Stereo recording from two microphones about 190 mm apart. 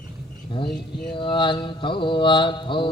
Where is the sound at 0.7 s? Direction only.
Centre (ahead or behind).